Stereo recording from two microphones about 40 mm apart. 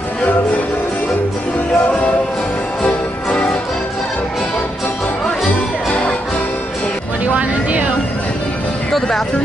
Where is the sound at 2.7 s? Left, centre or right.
Left.